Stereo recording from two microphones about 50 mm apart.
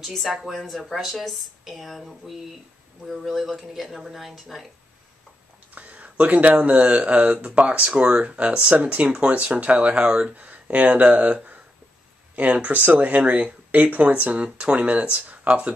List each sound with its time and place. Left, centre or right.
0.0 s a woman's voice: centre
0.3 s a woman's voice: centre
0.6 s a woman's voice: centre
5.8 s speech: right